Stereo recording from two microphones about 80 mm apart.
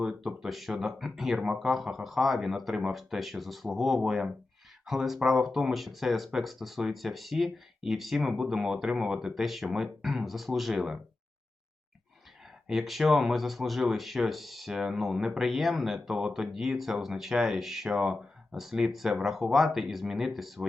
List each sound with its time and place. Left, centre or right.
0.0 s speech: centre
12.6 s speech: centre